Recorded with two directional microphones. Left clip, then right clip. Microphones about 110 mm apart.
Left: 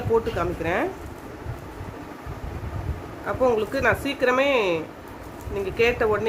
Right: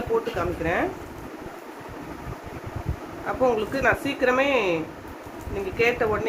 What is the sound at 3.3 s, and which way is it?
Speech, 35° left (ahead or behind).